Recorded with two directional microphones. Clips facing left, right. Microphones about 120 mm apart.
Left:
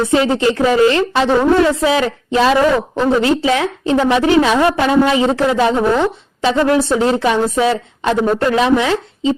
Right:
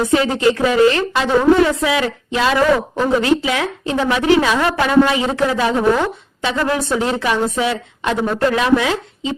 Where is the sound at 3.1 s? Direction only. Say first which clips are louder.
Left 1 dB; 30° left (ahead or behind).